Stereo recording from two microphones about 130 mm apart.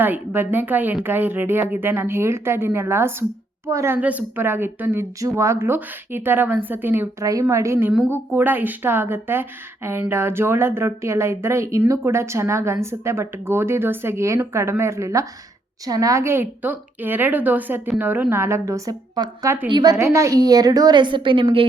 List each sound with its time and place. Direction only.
0.0 s a woman's voice: 15° right (ahead or behind); by 21.7 s 45° right (ahead or behind)